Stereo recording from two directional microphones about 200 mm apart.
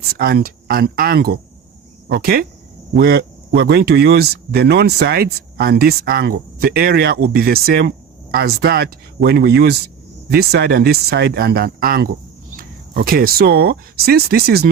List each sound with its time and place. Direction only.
0.1 s speech: 50° right (ahead or behind)